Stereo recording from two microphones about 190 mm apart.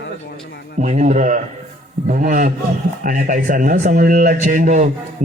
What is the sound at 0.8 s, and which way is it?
A man's voice, 40° right (ahead or behind).